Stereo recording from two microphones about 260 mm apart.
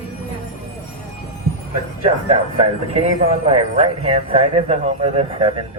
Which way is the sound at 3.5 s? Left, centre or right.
Right.